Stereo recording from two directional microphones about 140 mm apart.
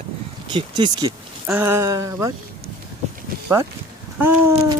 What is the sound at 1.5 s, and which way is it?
Speech, 15° right (ahead or behind).